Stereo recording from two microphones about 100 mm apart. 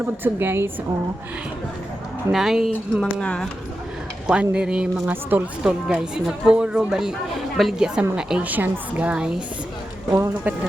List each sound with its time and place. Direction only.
0.0 s a woman's voice: 20° right (ahead or behind)
2.3 s speech: 5° right (ahead or behind)
3.0 s speech: 10° left (ahead or behind)
4.3 s a woman's voice: 10° right (ahead or behind)
10.1 s speech: 30° right (ahead or behind)